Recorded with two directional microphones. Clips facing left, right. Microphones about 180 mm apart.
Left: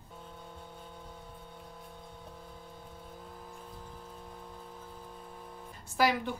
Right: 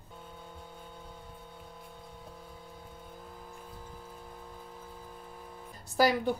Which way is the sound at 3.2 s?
5° right (ahead or behind).